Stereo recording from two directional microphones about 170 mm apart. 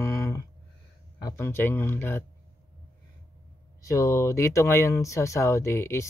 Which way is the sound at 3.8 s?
20° left (ahead or behind).